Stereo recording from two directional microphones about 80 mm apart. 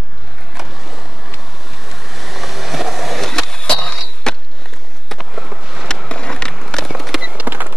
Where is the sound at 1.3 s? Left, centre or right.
Centre.